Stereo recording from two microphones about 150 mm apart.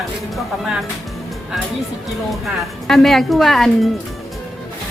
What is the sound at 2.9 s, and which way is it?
Speech, centre (ahead or behind).